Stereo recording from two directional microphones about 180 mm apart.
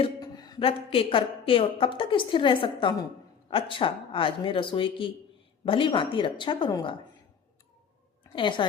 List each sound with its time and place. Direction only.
0.0 s a woman's voice: 20° left (ahead or behind)
8.4 s a woman's voice: 25° left (ahead or behind)